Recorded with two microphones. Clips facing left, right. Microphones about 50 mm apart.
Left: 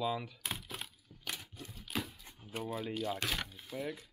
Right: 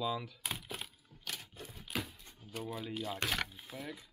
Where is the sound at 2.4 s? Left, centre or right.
Left.